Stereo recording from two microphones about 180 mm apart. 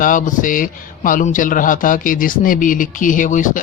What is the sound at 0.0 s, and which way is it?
Speech, 45° left (ahead or behind).